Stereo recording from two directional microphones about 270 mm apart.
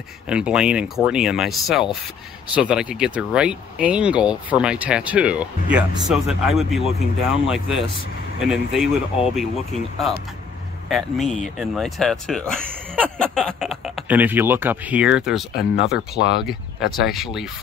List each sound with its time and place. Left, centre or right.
0.3 s speech: centre
15.5 s speech: left
16.4 s speech: centre